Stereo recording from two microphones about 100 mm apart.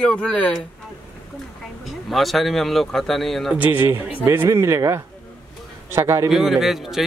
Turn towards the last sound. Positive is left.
turn(degrees=0)  # may be behind; listen again after turning